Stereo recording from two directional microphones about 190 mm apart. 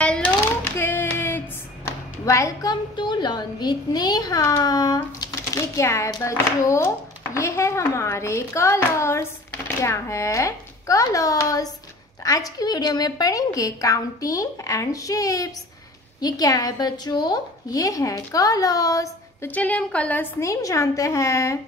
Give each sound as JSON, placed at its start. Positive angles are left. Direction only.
{"t": 0.0, "sound": "typewriter", "side_deg": 5}
{"t": 2.2, "sound": "a woman's voice", "side_deg": 15}